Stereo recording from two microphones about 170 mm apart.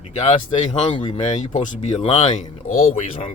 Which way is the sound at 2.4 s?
55° left (ahead or behind).